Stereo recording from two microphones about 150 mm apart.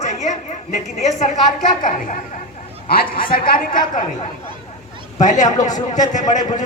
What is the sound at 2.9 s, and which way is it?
Speech, 75° left (ahead or behind).